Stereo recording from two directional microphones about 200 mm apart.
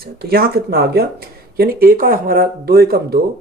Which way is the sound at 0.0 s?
50° right (ahead or behind).